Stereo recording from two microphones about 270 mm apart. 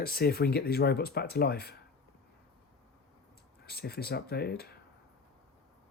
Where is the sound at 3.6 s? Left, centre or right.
Left.